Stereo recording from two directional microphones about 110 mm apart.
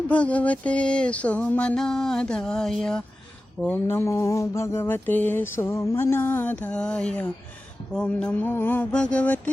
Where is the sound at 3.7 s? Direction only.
20° left (ahead or behind).